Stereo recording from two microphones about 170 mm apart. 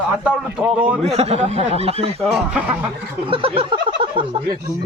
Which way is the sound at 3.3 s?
30° right (ahead or behind).